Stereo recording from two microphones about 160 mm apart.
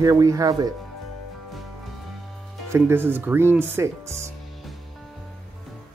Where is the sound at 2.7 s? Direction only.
15° right (ahead or behind).